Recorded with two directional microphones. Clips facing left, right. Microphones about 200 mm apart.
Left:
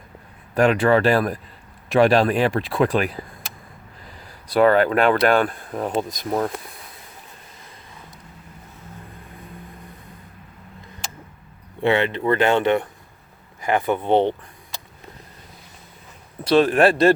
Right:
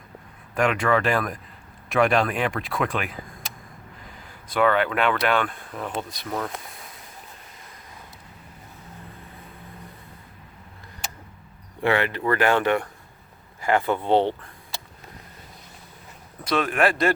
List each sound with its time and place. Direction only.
0.5 s speech: 35° left (ahead or behind)
4.4 s speech: 35° left (ahead or behind)
11.8 s speech: 25° left (ahead or behind)
16.4 s speech: 30° left (ahead or behind)